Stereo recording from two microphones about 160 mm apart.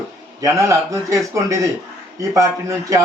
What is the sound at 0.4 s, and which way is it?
Speech, 20° right (ahead or behind).